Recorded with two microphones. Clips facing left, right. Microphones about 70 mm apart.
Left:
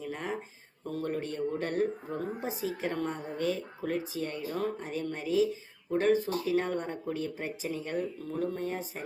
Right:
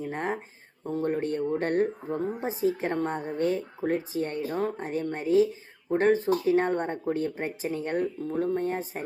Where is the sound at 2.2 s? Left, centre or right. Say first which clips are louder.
Right 8 dB; right.